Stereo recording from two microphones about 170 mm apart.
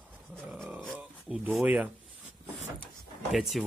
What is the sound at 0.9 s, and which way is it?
Speech, 5° right (ahead or behind).